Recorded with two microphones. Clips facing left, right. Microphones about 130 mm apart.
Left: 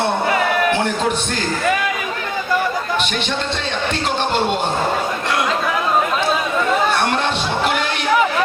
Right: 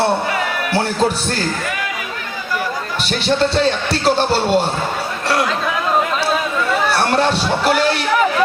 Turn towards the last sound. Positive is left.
turn(degrees=-35)  # may be behind; listen again after turning